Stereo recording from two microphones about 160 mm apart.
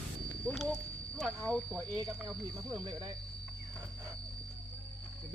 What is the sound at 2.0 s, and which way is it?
Speech, 25° right (ahead or behind).